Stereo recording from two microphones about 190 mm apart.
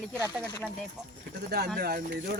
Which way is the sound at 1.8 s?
50° right (ahead or behind).